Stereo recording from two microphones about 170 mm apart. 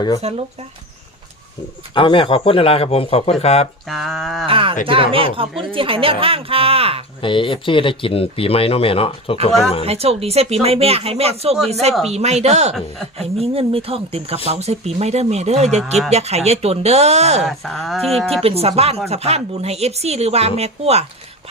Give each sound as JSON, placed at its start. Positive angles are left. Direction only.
{"t": 0.2, "sound": "speech", "side_deg": -40}
{"t": 2.0, "sound": "speech", "side_deg": 30}
{"t": 3.8, "sound": "speech", "side_deg": 0}
{"t": 4.4, "sound": "speech", "side_deg": -30}
{"t": 7.2, "sound": "speech", "side_deg": 30}
{"t": 9.8, "sound": "speech", "side_deg": -35}
{"t": 17.4, "sound": "speech", "side_deg": 0}
{"t": 18.4, "sound": "speech", "side_deg": -35}